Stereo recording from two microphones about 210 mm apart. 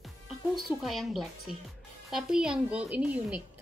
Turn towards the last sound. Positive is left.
turn(degrees=-5)  # may be behind; listen again after turning